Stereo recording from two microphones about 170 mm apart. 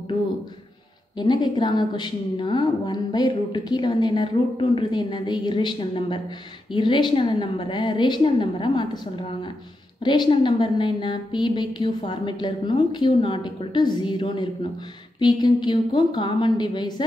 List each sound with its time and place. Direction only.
1.1 s a woman's voice: 25° left (ahead or behind)